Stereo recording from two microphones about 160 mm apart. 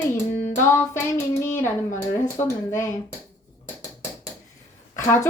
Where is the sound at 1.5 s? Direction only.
15° left (ahead or behind).